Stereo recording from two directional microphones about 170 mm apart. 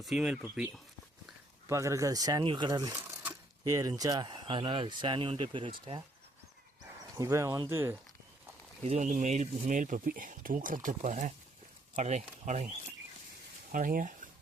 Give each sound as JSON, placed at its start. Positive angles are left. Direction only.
{"t": 0.0, "sound": "speech", "side_deg": 0}
{"t": 1.6, "sound": "speech", "side_deg": -15}
{"t": 7.2, "sound": "speech", "side_deg": -20}
{"t": 8.8, "sound": "speech", "side_deg": -40}
{"t": 13.7, "sound": "speech", "side_deg": -55}